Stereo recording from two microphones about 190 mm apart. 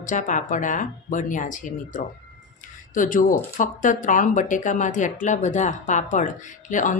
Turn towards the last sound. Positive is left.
turn(degrees=40)  # may be behind; listen again after turning